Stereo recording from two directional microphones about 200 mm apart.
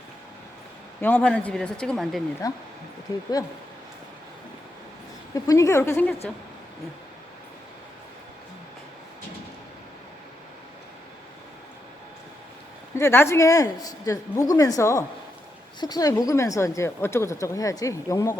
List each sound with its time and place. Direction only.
1.0 s speech: 5° left (ahead or behind)
2.4 s a woman's voice: 15° left (ahead or behind)
5.3 s a woman's voice: 15° left (ahead or behind)
13.0 s a woman's voice: 15° left (ahead or behind)